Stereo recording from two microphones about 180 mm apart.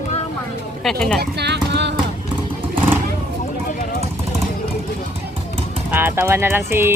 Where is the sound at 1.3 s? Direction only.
70° right (ahead or behind).